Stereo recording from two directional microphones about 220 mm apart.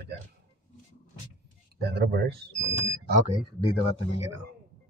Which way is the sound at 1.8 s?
45° right (ahead or behind).